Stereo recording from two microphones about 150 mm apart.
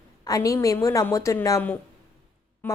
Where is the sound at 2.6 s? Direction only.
10° left (ahead or behind).